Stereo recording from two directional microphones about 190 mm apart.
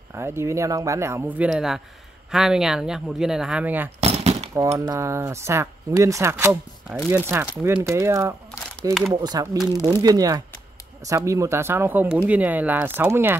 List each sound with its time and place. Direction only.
0.1 s speech: 15° right (ahead or behind)
4.0 s a sound: 35° right (ahead or behind)
4.7 s speech: 15° right (ahead or behind)